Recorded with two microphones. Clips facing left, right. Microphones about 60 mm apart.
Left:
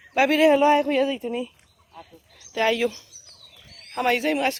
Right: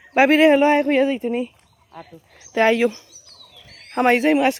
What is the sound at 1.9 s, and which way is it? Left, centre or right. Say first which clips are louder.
Speech: right 5 dB; right.